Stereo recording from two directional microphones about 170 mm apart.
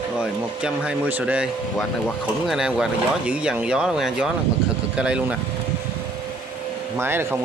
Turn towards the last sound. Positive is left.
turn(degrees=-15)  # may be behind; listen again after turning